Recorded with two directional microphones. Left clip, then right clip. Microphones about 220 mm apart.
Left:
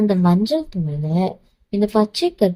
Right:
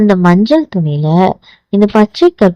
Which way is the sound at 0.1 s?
30° right (ahead or behind).